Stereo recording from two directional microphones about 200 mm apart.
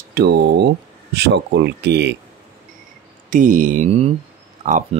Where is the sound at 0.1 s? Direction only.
55° right (ahead or behind).